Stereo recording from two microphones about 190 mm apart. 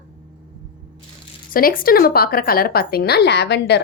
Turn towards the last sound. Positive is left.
turn(degrees=60)  # may be behind; listen again after turning